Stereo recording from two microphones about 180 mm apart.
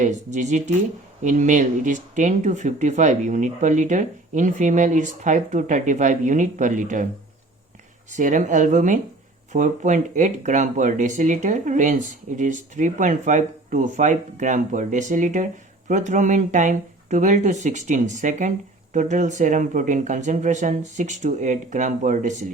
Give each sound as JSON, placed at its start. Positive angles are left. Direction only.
{"t": 0.0, "sound": "speech", "side_deg": -40}
{"t": 8.1, "sound": "speech", "side_deg": -45}